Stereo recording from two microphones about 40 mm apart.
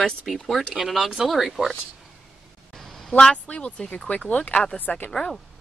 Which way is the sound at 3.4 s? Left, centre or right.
Left.